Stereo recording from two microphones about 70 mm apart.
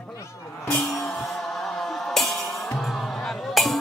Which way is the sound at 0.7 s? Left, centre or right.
Centre.